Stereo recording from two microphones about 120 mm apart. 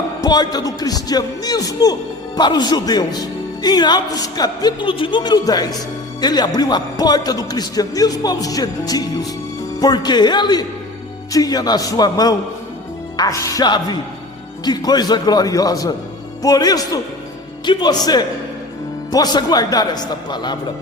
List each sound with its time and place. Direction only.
0.2 s a man's voice: 35° left (ahead or behind)